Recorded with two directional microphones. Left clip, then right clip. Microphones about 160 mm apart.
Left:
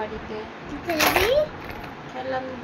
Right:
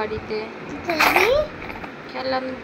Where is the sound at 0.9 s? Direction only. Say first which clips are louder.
Right 4 dB; 20° left (ahead or behind).